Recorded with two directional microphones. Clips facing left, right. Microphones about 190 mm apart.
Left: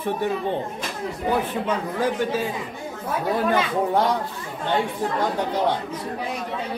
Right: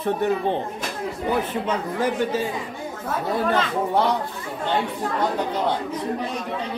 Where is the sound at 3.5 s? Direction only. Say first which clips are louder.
Left 1 dB; 10° left (ahead or behind).